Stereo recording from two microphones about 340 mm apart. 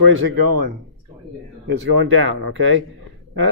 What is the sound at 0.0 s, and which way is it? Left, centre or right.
Speech, right.